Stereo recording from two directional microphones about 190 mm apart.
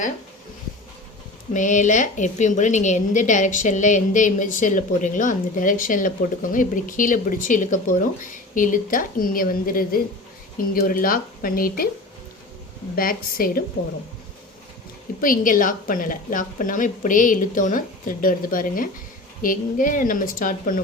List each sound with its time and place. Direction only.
1.5 s a woman's voice: 40° left (ahead or behind)
13.0 s a woman's voice: 50° left (ahead or behind)
15.2 s a woman's voice: 45° left (ahead or behind)